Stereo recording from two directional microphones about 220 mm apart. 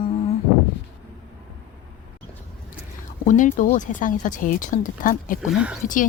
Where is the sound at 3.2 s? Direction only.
35° left (ahead or behind).